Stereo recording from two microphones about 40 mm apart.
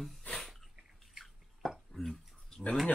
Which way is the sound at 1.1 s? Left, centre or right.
Centre.